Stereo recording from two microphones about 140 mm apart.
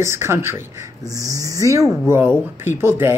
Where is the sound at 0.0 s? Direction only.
20° right (ahead or behind).